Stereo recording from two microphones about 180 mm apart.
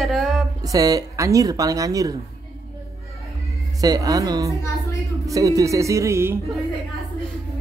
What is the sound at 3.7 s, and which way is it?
Speech, 20° right (ahead or behind).